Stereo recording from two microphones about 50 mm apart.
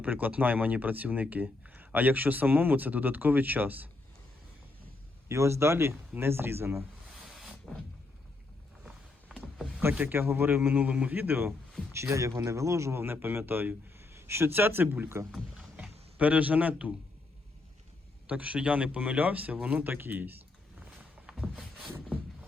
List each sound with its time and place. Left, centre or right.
0.0 s speech: right
5.3 s speech: right
7.3 s a sound: centre
9.3 s a sound: centre
10.1 s speech: right
10.8 s speech: right
11.2 s speech: right
11.9 s speech: right
13.0 s speech: right
15.1 s speech: right
15.7 s a sound: right
18.3 s speech: right
19.8 s speech: right
21.3 s a sound: centre